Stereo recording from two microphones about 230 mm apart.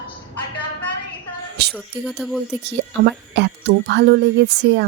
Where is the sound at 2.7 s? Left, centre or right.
Right.